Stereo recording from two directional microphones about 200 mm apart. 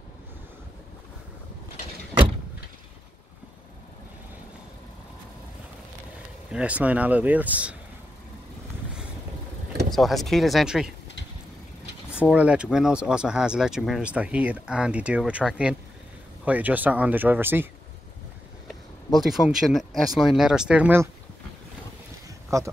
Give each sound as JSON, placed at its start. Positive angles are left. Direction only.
{"t": 6.5, "sound": "speech", "side_deg": -5}
{"t": 9.8, "sound": "speech", "side_deg": 0}
{"t": 12.3, "sound": "speech", "side_deg": -5}
{"t": 19.1, "sound": "speech", "side_deg": 0}
{"t": 22.5, "sound": "speech", "side_deg": -15}